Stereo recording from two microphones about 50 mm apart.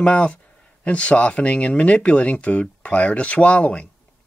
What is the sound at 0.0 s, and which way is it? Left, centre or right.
Speech, left.